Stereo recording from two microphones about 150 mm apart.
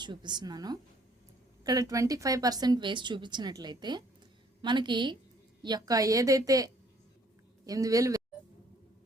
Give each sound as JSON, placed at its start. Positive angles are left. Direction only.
{"t": 0.0, "sound": "a woman's voice", "side_deg": -30}